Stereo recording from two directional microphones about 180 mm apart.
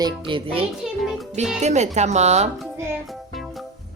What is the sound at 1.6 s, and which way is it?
Speech, 40° right (ahead or behind).